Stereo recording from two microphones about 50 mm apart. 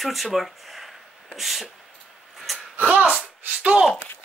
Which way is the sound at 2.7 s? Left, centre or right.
Right.